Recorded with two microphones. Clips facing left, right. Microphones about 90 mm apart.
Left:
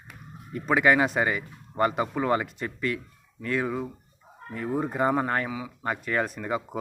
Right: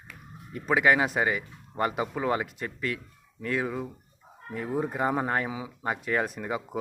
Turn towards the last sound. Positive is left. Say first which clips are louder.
# left 1 dB
turn(degrees=-10)  # may be behind; listen again after turning